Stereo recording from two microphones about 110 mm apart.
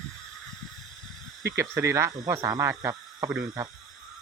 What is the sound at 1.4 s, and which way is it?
Speech, 25° right (ahead or behind).